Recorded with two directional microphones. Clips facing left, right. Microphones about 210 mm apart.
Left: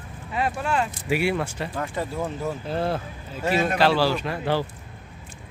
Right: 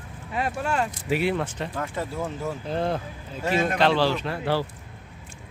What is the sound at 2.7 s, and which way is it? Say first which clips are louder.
Speech: right 1 dB; 5° left (ahead or behind).